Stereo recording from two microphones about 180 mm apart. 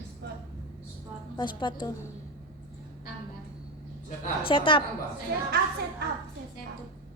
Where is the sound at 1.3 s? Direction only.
25° left (ahead or behind).